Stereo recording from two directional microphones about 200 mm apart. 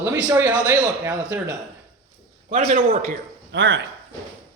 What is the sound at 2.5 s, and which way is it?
Speech, 35° right (ahead or behind).